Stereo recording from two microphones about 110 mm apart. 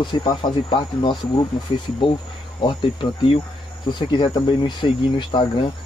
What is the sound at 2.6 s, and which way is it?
Speech, 45° left (ahead or behind).